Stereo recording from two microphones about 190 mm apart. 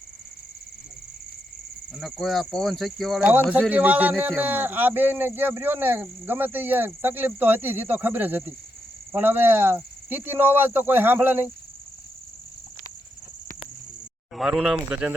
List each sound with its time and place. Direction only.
1.9 s speech: centre (ahead or behind)
14.3 s speech: centre (ahead or behind)